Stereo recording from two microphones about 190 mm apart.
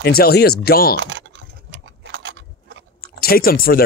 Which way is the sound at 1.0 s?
75° right (ahead or behind).